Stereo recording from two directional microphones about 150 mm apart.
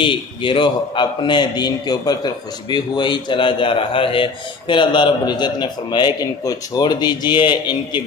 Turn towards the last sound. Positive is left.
turn(degrees=30)  # may be behind; listen again after turning